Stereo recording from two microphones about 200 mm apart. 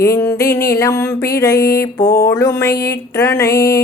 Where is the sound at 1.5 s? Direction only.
50° left (ahead or behind).